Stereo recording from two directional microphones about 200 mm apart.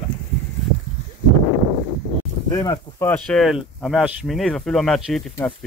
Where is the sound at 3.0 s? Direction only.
5° left (ahead or behind).